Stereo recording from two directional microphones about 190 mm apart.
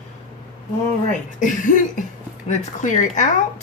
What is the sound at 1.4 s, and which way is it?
Cough, 45° left (ahead or behind).